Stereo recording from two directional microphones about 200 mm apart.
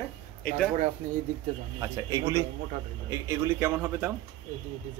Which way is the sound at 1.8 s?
15° right (ahead or behind).